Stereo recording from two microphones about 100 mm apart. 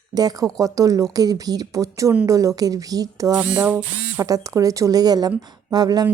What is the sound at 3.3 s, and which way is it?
Speech, 15° right (ahead or behind).